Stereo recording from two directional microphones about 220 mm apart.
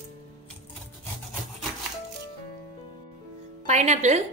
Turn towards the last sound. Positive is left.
turn(degrees=-30)  # may be behind; listen again after turning